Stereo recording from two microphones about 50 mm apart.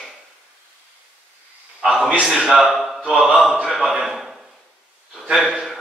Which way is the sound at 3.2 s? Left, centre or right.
Centre.